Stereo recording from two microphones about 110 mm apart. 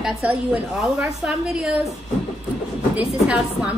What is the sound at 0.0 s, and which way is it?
A woman's voice, 10° right (ahead or behind).